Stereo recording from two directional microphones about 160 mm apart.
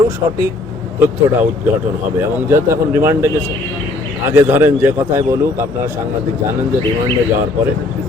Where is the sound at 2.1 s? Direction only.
15° right (ahead or behind).